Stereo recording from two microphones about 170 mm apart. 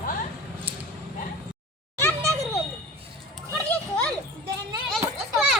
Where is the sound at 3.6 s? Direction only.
10° left (ahead or behind).